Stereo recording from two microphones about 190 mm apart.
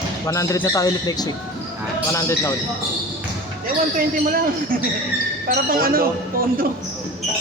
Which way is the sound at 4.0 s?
50° right (ahead or behind).